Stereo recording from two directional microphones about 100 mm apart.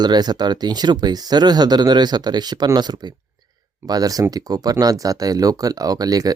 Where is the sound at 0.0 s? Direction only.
45° right (ahead or behind).